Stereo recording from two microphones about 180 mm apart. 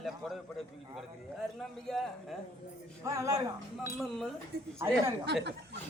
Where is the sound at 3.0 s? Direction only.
20° right (ahead or behind).